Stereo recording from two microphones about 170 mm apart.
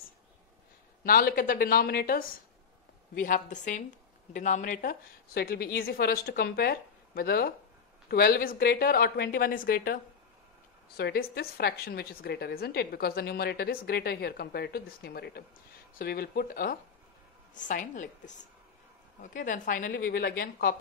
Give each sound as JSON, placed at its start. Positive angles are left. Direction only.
{"t": 1.0, "sound": "a woman's voice", "side_deg": 60}
{"t": 3.2, "sound": "a woman's voice", "side_deg": 50}
{"t": 11.0, "sound": "a woman's voice", "side_deg": 70}
{"t": 17.6, "sound": "a woman's voice", "side_deg": 50}
{"t": 19.9, "sound": "a woman's voice", "side_deg": 70}